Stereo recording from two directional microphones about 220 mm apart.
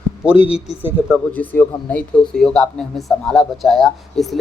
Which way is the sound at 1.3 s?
5° left (ahead or behind).